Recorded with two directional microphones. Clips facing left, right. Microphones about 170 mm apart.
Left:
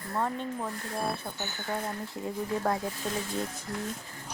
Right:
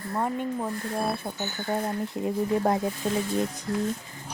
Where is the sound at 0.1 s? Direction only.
15° right (ahead or behind).